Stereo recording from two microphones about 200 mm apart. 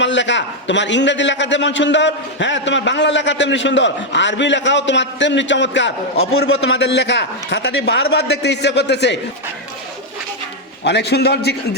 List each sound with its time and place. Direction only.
0.0 s a man's voice: 65° left (ahead or behind)
6.4 s a man's voice: 60° left (ahead or behind)
10.8 s a man's voice: 55° left (ahead or behind)